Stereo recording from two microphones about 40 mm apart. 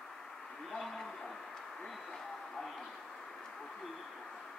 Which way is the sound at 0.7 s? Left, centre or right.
Centre.